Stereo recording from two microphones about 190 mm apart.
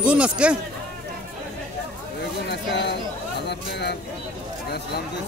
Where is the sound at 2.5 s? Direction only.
60° left (ahead or behind).